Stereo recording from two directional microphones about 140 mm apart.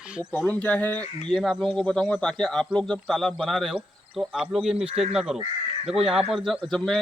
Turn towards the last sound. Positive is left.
turn(degrees=0)  # may be behind; listen again after turning